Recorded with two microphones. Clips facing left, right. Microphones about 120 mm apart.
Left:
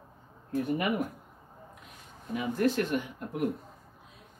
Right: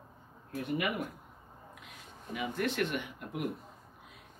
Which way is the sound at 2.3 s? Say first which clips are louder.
Left 6 dB; 35° left (ahead or behind).